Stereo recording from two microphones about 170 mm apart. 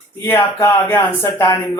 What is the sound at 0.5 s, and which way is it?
Speech, 20° left (ahead or behind).